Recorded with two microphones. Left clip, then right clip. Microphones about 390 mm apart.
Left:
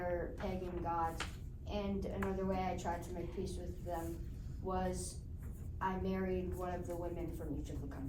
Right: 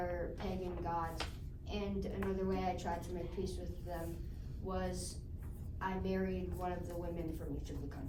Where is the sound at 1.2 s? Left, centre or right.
Right.